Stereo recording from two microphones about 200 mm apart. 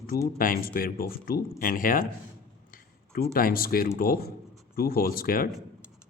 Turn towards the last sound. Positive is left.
turn(degrees=45)  # may be behind; listen again after turning